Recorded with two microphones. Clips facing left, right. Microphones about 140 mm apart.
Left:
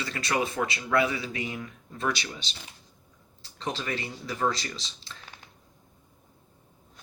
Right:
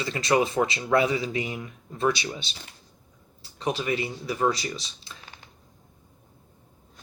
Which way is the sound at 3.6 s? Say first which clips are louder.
Right 5 dB; 15° right (ahead or behind).